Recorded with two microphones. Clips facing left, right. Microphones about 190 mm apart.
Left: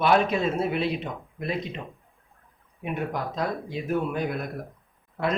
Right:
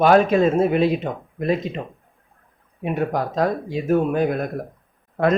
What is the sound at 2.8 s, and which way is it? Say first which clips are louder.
Speech: right 7 dB; 40° right (ahead or behind).